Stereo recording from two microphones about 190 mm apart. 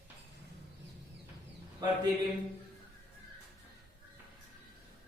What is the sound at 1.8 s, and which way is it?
Speech, 20° right (ahead or behind).